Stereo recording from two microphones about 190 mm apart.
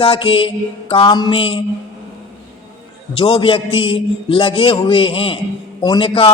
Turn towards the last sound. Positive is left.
turn(degrees=30)  # may be behind; listen again after turning